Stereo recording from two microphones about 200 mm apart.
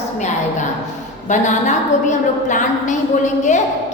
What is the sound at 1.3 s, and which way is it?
A woman's voice, 40° left (ahead or behind).